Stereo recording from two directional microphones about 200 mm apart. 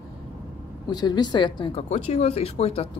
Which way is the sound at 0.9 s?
20° left (ahead or behind).